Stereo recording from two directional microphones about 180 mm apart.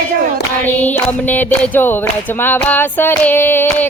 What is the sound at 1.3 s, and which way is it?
Child singing, 10° left (ahead or behind).